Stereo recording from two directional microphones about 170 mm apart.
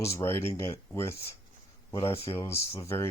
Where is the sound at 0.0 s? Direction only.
15° left (ahead or behind).